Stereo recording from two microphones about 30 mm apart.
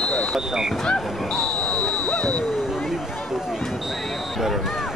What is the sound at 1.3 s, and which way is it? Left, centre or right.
Basketball bounce, left.